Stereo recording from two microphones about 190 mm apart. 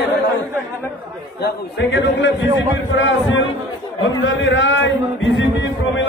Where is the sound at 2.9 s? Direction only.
85° left.